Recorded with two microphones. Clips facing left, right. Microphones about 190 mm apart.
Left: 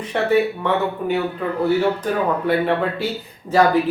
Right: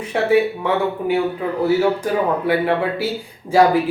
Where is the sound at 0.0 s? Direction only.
10° right (ahead or behind).